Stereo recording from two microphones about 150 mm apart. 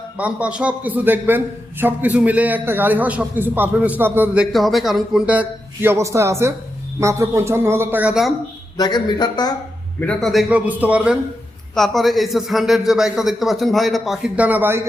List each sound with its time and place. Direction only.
0.2 s a man's voice: 10° right (ahead or behind)
4.5 s a man's voice: centre (ahead or behind)
8.8 s speech: 30° left (ahead or behind)
10.0 s a man's voice: 5° left (ahead or behind)
10.5 s a man's voice: 10° right (ahead or behind)